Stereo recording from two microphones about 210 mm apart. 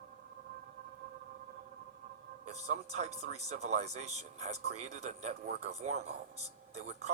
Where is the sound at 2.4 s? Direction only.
30° right (ahead or behind).